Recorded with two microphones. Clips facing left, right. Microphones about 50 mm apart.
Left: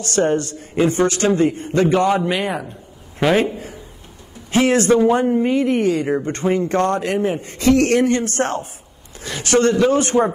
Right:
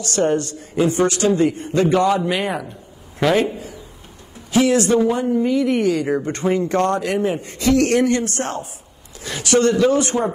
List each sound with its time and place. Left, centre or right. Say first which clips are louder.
0.0 s a man's voice: left 1 dB; left
2.3 s a man's voice: even; centre
3.2 s a man's voice: left 1 dB; centre
3.5 s a sound: left 1 dB; left
4.5 s a man's voice: left 1 dB; left